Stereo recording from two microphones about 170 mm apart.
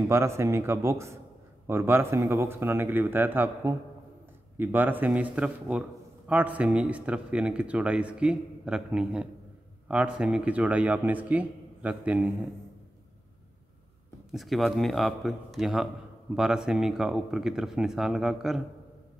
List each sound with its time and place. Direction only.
0.1 s a man's voice: 15° right (ahead or behind)
14.3 s speech: centre (ahead or behind)